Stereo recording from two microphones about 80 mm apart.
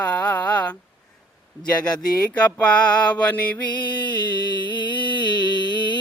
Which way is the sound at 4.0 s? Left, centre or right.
Left.